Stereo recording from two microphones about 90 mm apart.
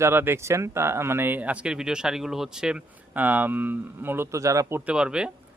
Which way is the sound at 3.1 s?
20° right (ahead or behind).